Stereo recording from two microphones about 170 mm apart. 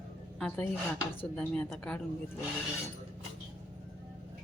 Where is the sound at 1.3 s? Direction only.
5° left (ahead or behind).